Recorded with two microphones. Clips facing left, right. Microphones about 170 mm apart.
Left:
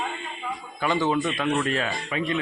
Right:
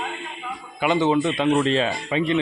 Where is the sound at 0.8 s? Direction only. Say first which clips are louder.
Right 4 dB; 20° right (ahead or behind).